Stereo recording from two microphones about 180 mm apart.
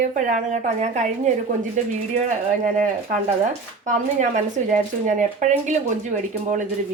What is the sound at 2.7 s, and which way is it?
Speech, 45° right (ahead or behind).